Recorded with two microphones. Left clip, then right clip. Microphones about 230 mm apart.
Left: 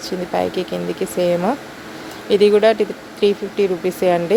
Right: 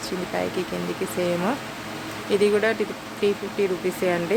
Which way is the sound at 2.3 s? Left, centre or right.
Centre.